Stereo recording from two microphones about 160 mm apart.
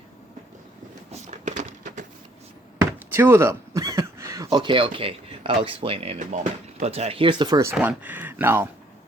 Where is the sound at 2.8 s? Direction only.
15° right (ahead or behind); by 6.1 s 35° right (ahead or behind).